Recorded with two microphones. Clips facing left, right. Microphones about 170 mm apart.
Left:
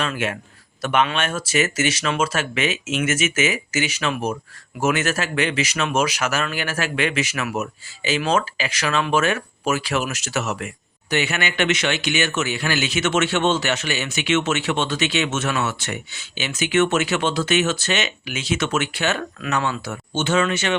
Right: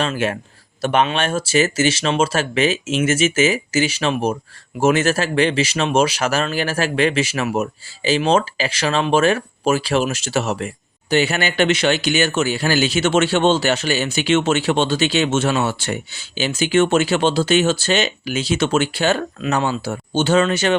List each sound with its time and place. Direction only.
0.0 s speech: 30° right (ahead or behind)